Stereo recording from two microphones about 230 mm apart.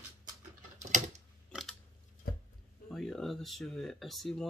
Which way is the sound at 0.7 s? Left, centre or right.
Right.